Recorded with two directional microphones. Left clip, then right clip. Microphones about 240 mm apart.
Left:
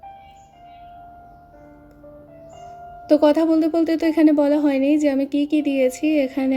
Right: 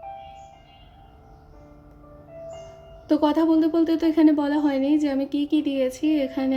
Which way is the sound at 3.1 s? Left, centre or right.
Left.